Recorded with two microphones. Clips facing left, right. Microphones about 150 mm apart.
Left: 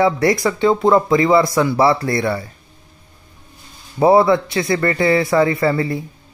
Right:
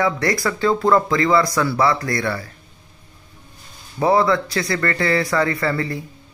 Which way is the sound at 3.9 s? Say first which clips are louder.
Left 5 dB; 25° left (ahead or behind).